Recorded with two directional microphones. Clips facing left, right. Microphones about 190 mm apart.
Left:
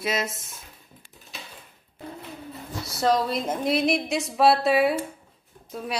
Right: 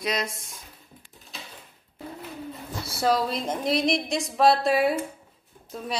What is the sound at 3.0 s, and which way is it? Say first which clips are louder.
Speech: left 1 dB; 5° right (ahead or behind).